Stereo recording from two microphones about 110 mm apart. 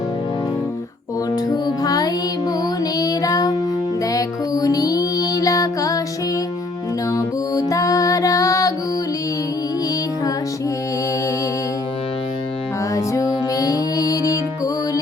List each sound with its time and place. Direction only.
1.5 s music: 35° left (ahead or behind)
7.1 s music: 30° left (ahead or behind)
12.9 s music: 30° left (ahead or behind)